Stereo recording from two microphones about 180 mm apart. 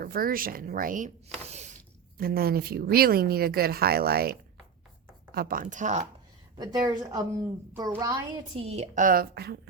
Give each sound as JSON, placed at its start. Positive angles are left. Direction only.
{"t": 0.0, "sound": "speech", "side_deg": -55}
{"t": 2.1, "sound": "speech", "side_deg": -55}
{"t": 6.6, "sound": "a woman's voice", "side_deg": -20}
{"t": 8.6, "sound": "speech", "side_deg": -35}